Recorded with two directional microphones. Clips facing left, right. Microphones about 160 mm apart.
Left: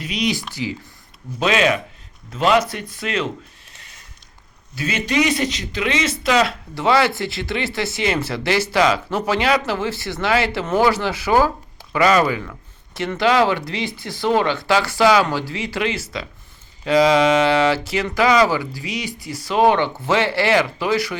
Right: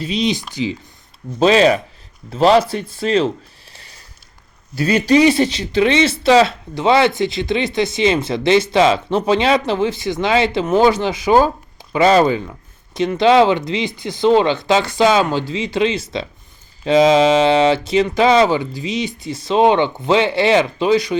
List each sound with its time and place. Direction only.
0.0 s speech: 25° right (ahead or behind)
1.4 s speech: 35° right (ahead or behind)
3.7 s a sound: 35° right (ahead or behind)
4.7 s speech: 40° right (ahead or behind); by 21.2 s 20° right (ahead or behind)